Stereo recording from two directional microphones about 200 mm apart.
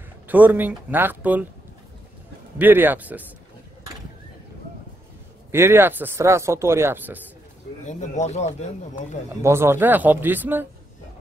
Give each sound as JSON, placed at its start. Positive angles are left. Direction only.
{"t": 0.3, "sound": "speech", "side_deg": -10}
{"t": 2.6, "sound": "speech", "side_deg": -10}
{"t": 5.5, "sound": "speech", "side_deg": -10}
{"t": 7.8, "sound": "speech", "side_deg": 35}
{"t": 9.4, "sound": "speech", "side_deg": -10}